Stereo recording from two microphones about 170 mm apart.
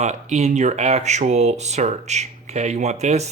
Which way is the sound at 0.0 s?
40° right (ahead or behind).